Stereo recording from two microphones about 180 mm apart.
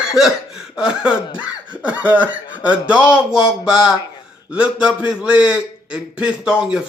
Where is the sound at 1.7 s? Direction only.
10° right (ahead or behind).